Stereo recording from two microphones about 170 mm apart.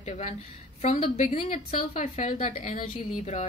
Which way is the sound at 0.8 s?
45° left (ahead or behind).